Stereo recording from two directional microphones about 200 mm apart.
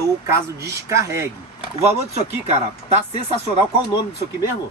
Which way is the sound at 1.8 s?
30° right (ahead or behind).